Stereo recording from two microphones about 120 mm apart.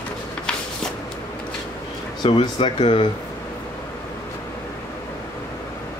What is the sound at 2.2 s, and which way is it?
Speech, 40° left (ahead or behind).